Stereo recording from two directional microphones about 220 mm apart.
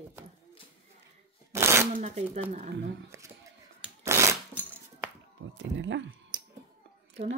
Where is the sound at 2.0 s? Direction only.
30° right (ahead or behind).